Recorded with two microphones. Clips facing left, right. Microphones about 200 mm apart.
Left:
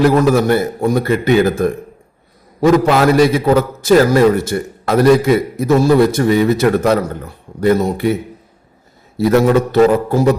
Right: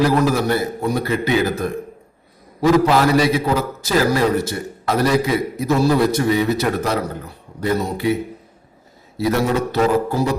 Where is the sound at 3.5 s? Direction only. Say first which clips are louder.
Left 8 dB; 50° left (ahead or behind).